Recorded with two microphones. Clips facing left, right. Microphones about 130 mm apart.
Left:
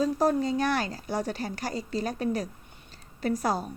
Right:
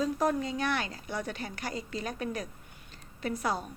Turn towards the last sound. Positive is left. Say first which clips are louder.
# left 5 dB
turn(degrees=40)  # may be behind; listen again after turning